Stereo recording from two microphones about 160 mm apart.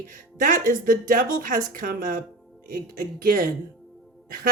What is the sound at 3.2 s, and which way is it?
Speech, 60° right (ahead or behind).